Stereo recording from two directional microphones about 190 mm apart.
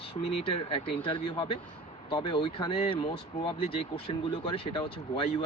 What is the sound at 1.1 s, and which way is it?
Speech, 25° left (ahead or behind).